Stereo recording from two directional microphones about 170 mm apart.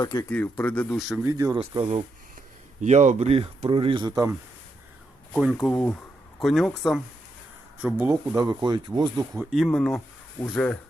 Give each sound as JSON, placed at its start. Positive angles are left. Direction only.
{"t": 0.0, "sound": "speech", "side_deg": 25}
{"t": 0.3, "sound": "speech", "side_deg": 10}
{"t": 1.2, "sound": "speech", "side_deg": -20}
{"t": 1.5, "sound": "speech", "side_deg": -35}
{"t": 2.8, "sound": "speech", "side_deg": -45}
{"t": 5.4, "sound": "speech", "side_deg": -5}
{"t": 7.8, "sound": "speech", "side_deg": -10}
{"t": 8.4, "sound": "speech", "side_deg": -25}
{"t": 9.4, "sound": "speech", "side_deg": -5}